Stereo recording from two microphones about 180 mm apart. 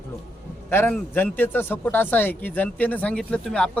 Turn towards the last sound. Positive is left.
turn(degrees=5)  # may be behind; listen again after turning